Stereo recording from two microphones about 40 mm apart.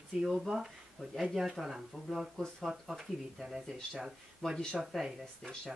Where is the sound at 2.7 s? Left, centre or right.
Centre.